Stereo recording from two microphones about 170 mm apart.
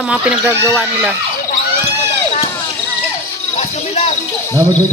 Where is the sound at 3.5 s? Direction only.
40° left (ahead or behind).